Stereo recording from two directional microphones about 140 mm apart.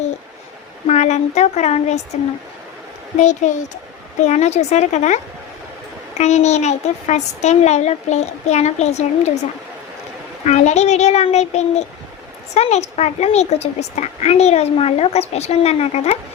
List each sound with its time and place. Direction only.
0.9 s a woman's voice: 55° left (ahead or behind)
3.2 s a woman's voice: 60° left (ahead or behind)
10.4 s a woman's voice: 55° left (ahead or behind)